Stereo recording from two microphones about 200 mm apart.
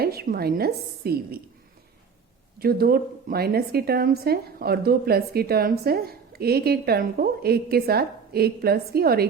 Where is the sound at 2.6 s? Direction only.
50° right (ahead or behind).